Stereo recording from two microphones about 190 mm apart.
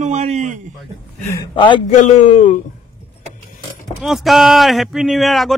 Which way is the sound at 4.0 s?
Centre (ahead or behind).